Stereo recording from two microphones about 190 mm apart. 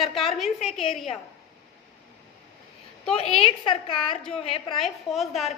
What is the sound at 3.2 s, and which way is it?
A woman's voice, 30° left (ahead or behind).